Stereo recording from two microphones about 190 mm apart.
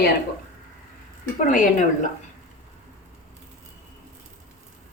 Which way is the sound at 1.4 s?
40° left (ahead or behind).